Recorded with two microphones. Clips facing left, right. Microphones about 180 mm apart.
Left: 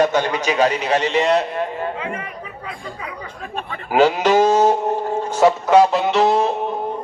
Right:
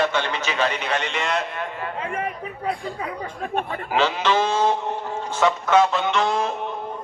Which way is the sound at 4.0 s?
45° left (ahead or behind).